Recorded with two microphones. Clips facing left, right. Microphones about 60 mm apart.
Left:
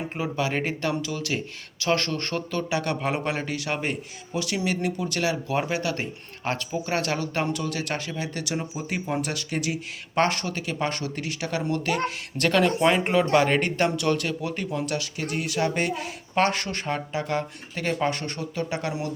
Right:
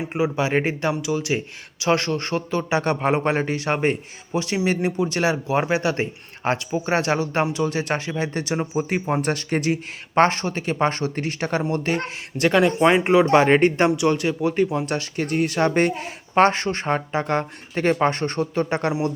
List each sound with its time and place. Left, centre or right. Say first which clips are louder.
0.1 s a man's voice: right 7 dB; right
12.4 s a man's voice: right 4 dB; centre
13.3 s a man's voice: right 6 dB; right